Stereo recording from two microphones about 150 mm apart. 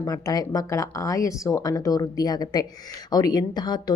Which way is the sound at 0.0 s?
25° left (ahead or behind).